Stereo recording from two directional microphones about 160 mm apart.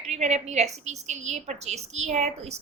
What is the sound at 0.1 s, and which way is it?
A woman's voice, 45° right (ahead or behind).